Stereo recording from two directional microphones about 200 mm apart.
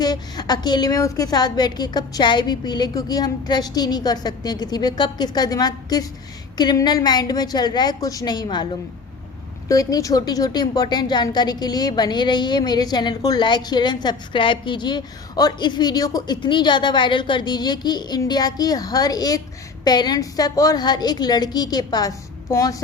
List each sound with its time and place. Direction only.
0.0 s a woman's voice: 20° left (ahead or behind)